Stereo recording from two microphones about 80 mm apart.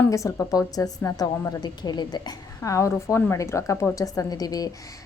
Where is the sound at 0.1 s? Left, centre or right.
Left.